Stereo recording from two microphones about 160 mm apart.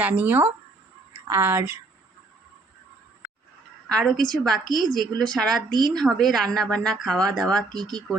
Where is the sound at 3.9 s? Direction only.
Centre (ahead or behind).